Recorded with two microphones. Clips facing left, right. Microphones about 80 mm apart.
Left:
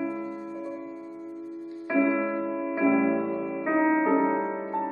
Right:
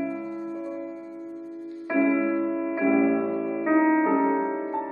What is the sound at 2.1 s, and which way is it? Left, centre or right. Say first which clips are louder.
Music: right 3 dB; centre.